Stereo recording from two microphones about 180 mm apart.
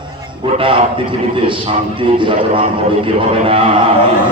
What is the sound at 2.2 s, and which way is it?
A man's voice, 30° right (ahead or behind).